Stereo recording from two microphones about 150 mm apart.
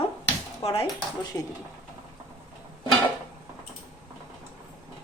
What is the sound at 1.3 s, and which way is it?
Speech, 20° left (ahead or behind).